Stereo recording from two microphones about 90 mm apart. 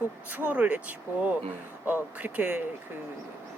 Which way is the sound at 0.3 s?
20° right (ahead or behind).